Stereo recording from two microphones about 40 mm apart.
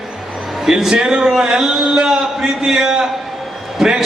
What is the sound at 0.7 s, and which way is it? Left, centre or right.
A man's voice, centre.